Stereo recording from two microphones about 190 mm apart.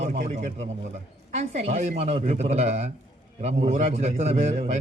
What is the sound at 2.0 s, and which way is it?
Speech, 35° right (ahead or behind).